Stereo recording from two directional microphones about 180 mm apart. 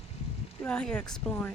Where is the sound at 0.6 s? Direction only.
5° left (ahead or behind).